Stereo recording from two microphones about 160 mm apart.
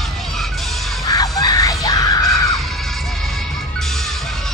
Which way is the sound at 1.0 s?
25° left (ahead or behind).